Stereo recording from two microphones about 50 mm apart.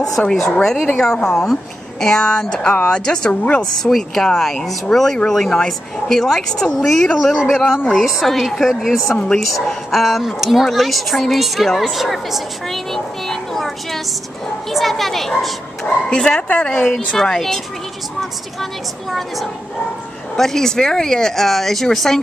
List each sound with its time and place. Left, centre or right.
0.2 s a woman's voice: left
0.6 s a woman's voice: centre
3.8 s a woman's voice: centre
7.2 s a woman's voice: centre
14.7 s a woman's voice: centre
16.1 s a woman's voice: centre
17.1 s speech: centre
20.3 s speech: centre